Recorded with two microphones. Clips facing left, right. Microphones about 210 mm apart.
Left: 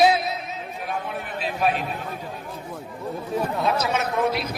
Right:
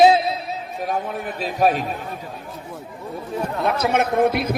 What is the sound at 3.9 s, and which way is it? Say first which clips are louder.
Speech: right 5 dB; 55° right (ahead or behind).